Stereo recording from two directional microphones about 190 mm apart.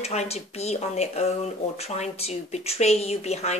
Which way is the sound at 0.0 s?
35° left (ahead or behind).